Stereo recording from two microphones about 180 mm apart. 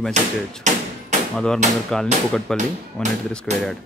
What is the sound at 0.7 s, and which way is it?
Speech, 40° right (ahead or behind).